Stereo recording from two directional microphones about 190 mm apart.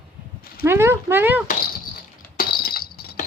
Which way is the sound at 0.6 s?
15° right (ahead or behind).